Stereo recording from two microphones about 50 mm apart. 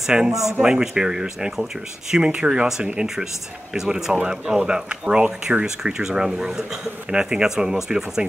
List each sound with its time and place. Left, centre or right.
0.1 s speech: centre